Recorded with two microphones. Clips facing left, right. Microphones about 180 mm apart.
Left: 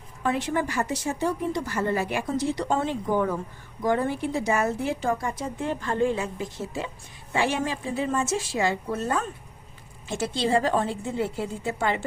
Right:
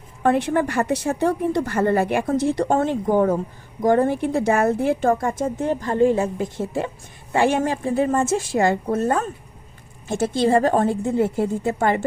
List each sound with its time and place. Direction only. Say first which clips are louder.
0.2 s a woman's voice: right 7 dB; 60° right (ahead or behind)
5.6 s a woman's voice: right 6 dB; 20° right (ahead or behind)
6.1 s a woman's voice: right 8 dB; 55° right (ahead or behind)